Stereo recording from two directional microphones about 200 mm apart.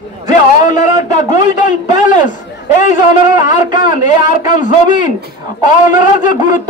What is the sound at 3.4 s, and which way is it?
A man's voice, 40° left (ahead or behind).